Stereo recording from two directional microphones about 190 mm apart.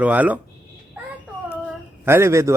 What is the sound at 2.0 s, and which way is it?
Speech, 15° right (ahead or behind).